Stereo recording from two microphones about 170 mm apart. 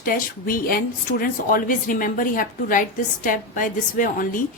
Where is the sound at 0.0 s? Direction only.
55° left (ahead or behind).